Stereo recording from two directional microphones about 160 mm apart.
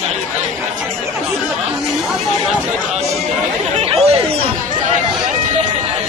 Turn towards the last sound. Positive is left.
turn(degrees=-40)  # may be behind; listen again after turning